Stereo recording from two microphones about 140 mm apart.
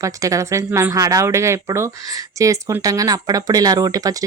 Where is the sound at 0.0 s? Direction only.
25° right (ahead or behind).